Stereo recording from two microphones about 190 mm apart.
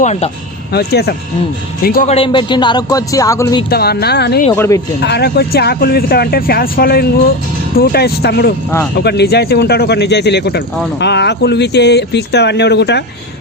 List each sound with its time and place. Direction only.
0.0 s speech: 35° left (ahead or behind)
0.7 s a man's voice: 55° left (ahead or behind)
2.0 s speech: 30° left (ahead or behind)
3.7 s speech: 55° left (ahead or behind)
4.5 s speech: 10° left (ahead or behind)
4.9 s speech: 60° left (ahead or behind)